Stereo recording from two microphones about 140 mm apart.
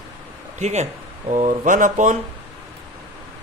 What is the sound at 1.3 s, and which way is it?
Speech, 65° right (ahead or behind).